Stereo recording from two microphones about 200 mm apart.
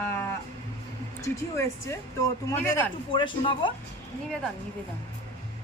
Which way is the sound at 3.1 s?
25° left (ahead or behind).